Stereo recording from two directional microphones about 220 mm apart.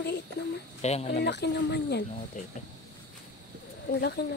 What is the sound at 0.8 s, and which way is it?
Speech, 30° left (ahead or behind).